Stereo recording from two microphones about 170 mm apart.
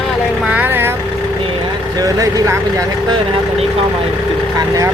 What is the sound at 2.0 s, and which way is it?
Speech, 20° right (ahead or behind).